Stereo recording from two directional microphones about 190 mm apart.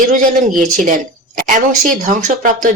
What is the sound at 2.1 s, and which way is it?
Speech, 45° right (ahead or behind).